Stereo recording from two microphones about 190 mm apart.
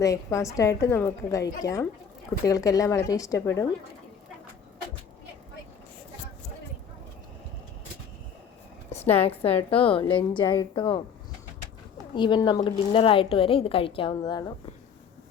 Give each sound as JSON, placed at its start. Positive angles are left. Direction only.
{"t": 0.0, "sound": "a woman's voice", "side_deg": 15}
{"t": 8.9, "sound": "a woman's voice", "side_deg": 35}
{"t": 12.1, "sound": "a woman's voice", "side_deg": 25}